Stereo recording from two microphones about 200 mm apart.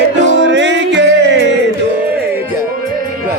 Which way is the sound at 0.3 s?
65° right (ahead or behind).